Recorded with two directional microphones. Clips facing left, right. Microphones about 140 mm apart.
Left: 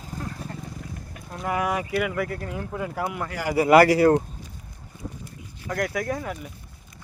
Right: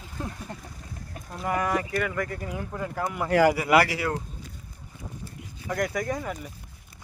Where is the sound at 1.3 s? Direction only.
5° left (ahead or behind).